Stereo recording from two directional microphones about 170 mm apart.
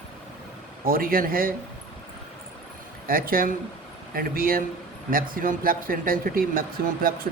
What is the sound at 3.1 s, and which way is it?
Speech, 60° right (ahead or behind).